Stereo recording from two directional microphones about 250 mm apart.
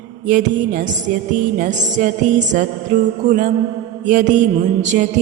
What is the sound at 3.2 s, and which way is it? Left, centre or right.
Mantra, right.